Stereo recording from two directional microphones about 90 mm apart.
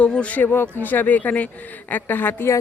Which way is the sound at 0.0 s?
15° left (ahead or behind).